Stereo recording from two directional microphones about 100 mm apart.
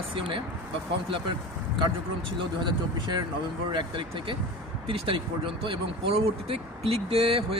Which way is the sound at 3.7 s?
55° right (ahead or behind).